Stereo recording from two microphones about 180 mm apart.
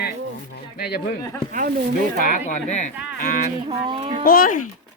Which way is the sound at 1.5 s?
50° right (ahead or behind).